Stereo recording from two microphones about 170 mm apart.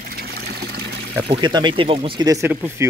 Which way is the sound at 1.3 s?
25° right (ahead or behind).